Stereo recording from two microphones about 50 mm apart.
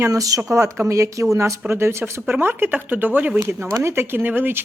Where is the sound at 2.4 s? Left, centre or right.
Right.